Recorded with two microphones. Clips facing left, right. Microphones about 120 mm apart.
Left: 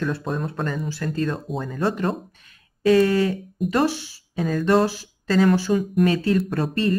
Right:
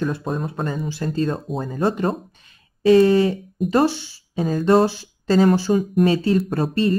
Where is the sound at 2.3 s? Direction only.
25° right (ahead or behind).